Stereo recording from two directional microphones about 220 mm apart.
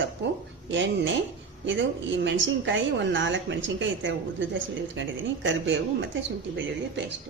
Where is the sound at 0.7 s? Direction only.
55° right (ahead or behind).